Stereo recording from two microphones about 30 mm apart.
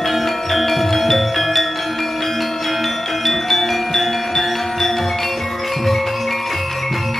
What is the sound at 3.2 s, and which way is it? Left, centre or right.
Music, centre.